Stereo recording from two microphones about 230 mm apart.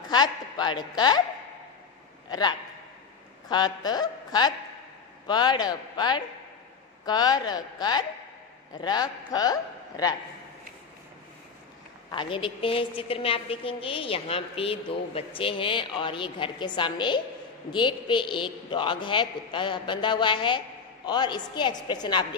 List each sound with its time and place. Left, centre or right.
0.1 s a woman's voice: centre
2.2 s a man's voice: centre
12.1 s a woman's voice: left